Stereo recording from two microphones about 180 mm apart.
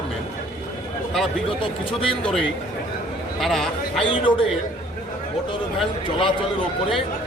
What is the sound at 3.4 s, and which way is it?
Speech, centre (ahead or behind).